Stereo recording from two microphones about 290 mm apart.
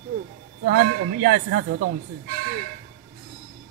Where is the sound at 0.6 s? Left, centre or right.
Right.